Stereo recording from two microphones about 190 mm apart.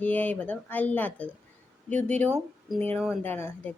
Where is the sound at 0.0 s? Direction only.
10° left (ahead or behind).